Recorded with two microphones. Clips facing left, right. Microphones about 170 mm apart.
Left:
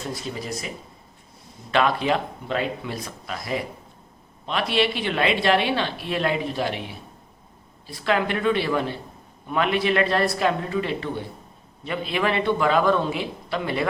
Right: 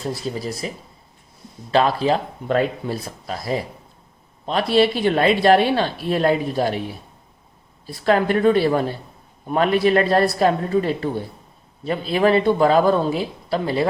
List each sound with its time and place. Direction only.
0.3 s speech: 35° right (ahead or behind)
1.7 s speech: 35° right (ahead or behind)
7.9 s speech: 40° right (ahead or behind)